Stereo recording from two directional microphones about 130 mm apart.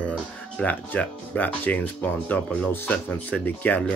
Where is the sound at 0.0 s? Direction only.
10° left (ahead or behind).